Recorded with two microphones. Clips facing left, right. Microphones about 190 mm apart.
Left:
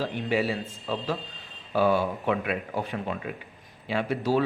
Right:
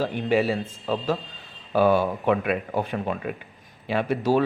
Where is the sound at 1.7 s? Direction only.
55° right (ahead or behind).